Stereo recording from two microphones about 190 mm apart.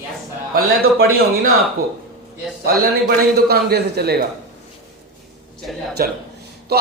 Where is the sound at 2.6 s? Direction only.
55° right (ahead or behind).